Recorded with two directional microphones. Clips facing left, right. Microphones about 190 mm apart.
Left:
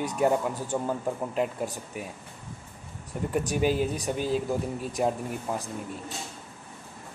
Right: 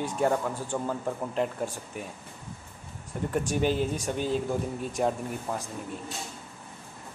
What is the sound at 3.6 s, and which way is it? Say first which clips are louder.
Speech: left 2 dB; 10° left (ahead or behind).